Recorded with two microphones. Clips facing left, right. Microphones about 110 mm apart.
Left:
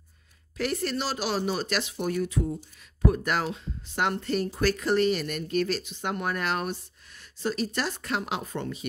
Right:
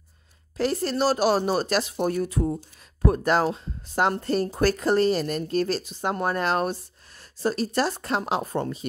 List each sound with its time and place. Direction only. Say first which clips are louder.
0.6 s speech: right 5 dB; 35° right (ahead or behind)